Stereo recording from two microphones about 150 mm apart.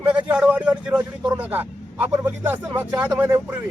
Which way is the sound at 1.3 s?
10° right (ahead or behind).